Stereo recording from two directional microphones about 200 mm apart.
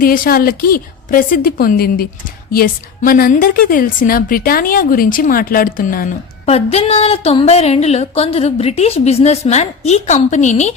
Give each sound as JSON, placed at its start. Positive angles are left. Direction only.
{"t": 0.0, "sound": "a woman's voice", "side_deg": 45}
{"t": 6.4, "sound": "speech", "side_deg": 30}